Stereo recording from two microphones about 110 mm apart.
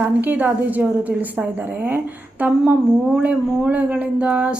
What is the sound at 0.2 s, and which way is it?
Speech, 15° right (ahead or behind).